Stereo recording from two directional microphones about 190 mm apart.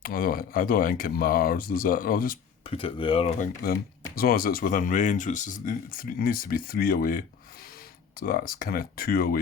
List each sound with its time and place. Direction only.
0.0 s speech: 50° left (ahead or behind)
2.6 s speech: 30° left (ahead or behind); by 9.4 s 50° left (ahead or behind)